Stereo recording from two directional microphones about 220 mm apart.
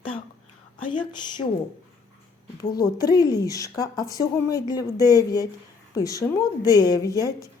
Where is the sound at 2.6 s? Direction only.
15° left (ahead or behind).